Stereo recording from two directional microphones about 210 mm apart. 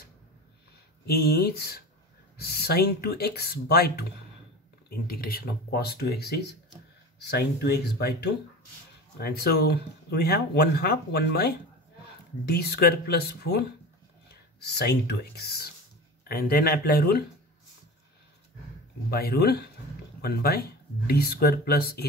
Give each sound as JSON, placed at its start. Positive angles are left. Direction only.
{"t": 1.0, "sound": "speech", "side_deg": 50}
{"t": 19.0, "sound": "speech", "side_deg": 50}